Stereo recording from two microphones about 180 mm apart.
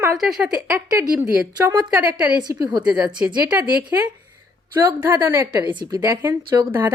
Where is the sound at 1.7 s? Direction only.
25° right (ahead or behind).